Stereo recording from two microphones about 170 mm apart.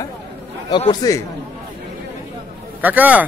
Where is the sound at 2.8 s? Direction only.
10° right (ahead or behind).